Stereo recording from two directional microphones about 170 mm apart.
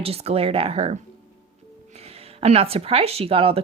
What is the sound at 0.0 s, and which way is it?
Speech, 35° right (ahead or behind).